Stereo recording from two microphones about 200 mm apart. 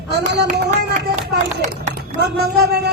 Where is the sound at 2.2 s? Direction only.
55° right (ahead or behind).